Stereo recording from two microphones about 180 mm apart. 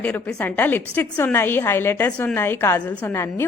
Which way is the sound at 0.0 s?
5° left (ahead or behind).